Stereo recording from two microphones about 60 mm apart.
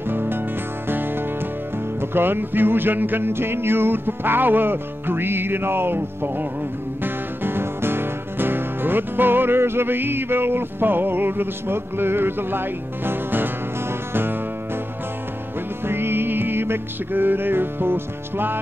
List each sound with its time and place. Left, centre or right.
0.1 s music: right
15.9 s music: right